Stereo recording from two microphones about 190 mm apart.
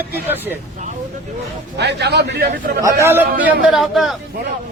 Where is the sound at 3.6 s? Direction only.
Centre (ahead or behind).